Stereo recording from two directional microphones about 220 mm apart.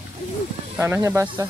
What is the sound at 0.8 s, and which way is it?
Speech, 10° right (ahead or behind).